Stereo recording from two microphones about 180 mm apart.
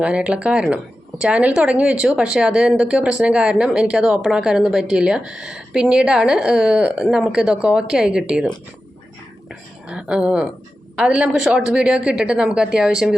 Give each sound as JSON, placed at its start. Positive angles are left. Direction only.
{"t": 0.0, "sound": "a woman's voice", "side_deg": -5}